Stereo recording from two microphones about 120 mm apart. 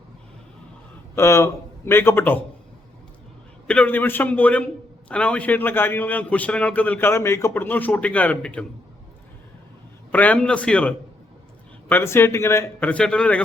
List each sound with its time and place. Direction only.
1.1 s speech: 25° left (ahead or behind)
3.7 s a man's voice: 15° left (ahead or behind)
10.1 s a man's voice: 10° left (ahead or behind)
12.8 s a man's voice: 10° left (ahead or behind)